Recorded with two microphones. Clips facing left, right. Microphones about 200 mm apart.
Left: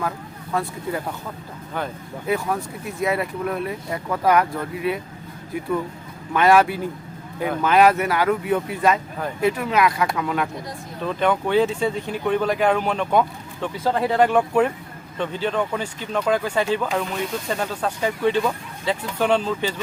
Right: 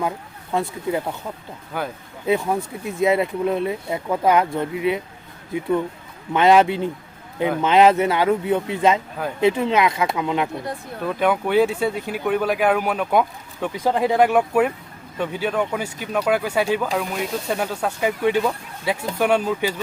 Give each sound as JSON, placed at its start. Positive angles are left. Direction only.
{"t": 1.7, "sound": "speech", "side_deg": -10}
{"t": 2.2, "sound": "speech", "side_deg": -25}
{"t": 6.3, "sound": "speech", "side_deg": -20}
{"t": 11.0, "sound": "speech", "side_deg": -10}